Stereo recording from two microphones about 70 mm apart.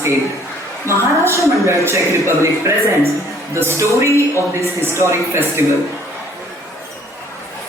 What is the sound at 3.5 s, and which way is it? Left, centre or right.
A man's voice, right.